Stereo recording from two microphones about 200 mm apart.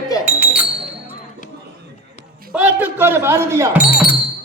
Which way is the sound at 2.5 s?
10° right (ahead or behind).